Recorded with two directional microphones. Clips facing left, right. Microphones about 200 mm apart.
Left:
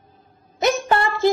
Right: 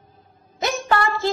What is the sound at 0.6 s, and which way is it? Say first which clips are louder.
Music: left 3 dB; 20° left (ahead or behind).